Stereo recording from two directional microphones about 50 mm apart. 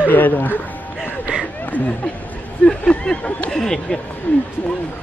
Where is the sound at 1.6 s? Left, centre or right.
Left.